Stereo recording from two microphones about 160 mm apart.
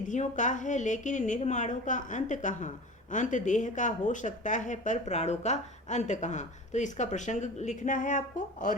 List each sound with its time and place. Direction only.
0.1 s a woman's voice: 50° left (ahead or behind)